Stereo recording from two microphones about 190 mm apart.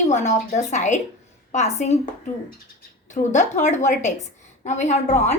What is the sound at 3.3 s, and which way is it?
A woman's voice, 40° left (ahead or behind).